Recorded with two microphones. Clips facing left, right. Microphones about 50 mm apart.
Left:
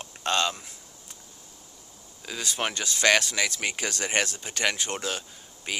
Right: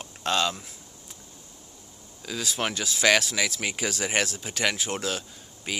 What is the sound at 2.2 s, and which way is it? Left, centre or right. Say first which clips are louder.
Speech: right 1 dB; centre.